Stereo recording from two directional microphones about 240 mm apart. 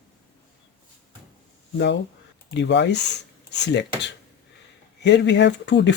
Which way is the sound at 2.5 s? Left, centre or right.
Left.